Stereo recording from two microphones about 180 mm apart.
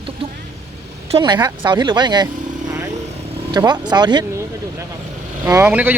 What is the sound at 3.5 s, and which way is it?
Speech, 25° right (ahead or behind).